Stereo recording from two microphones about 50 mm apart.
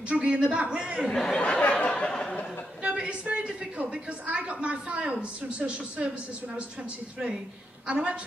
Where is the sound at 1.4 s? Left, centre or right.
Left.